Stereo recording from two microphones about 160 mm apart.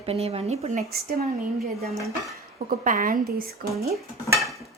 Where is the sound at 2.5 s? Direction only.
60° right (ahead or behind).